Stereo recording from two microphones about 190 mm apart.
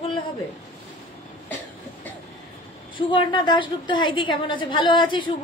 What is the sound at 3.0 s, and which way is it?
A woman's voice, 25° left (ahead or behind).